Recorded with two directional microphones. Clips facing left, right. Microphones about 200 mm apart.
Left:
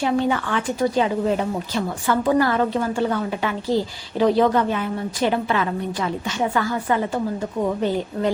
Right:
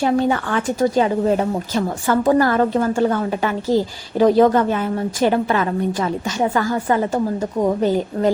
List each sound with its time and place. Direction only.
0.0 s a woman's voice: 45° right (ahead or behind)